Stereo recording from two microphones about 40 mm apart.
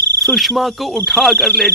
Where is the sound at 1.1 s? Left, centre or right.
Centre.